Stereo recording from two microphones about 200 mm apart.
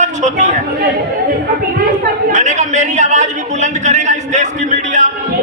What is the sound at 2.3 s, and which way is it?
A man's voice, 35° right (ahead or behind).